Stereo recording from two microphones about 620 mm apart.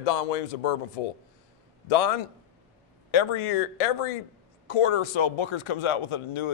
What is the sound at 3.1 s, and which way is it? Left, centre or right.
Speech, left.